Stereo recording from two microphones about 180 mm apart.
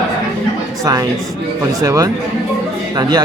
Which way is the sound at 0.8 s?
20° right (ahead or behind).